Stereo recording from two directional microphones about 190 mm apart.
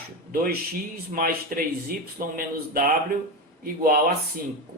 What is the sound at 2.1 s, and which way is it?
Speech, 50° right (ahead or behind).